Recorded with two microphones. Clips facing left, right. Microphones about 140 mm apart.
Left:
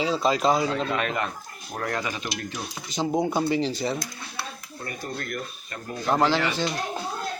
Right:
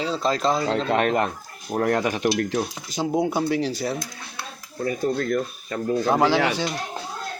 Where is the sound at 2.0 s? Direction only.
60° right (ahead or behind).